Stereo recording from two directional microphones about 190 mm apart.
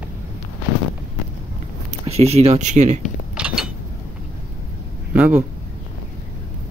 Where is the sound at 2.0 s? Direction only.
35° right (ahead or behind).